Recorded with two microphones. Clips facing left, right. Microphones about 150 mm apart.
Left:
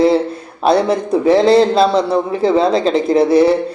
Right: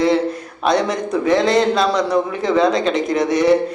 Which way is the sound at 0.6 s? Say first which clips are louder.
Left 4 dB; 30° left (ahead or behind).